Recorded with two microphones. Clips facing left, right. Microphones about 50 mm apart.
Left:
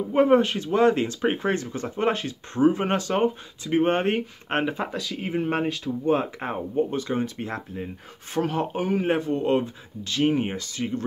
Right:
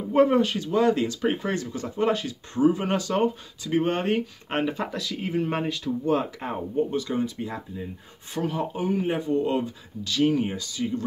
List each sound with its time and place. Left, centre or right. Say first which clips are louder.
0.3 s speech: left 3 dB; left
7.2 s speech: left 1 dB; left
9.3 s speech: left 1 dB; left